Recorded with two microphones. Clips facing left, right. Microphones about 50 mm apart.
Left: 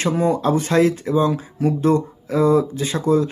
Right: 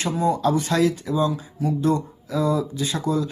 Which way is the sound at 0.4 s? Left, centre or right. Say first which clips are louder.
Left 4 dB; left.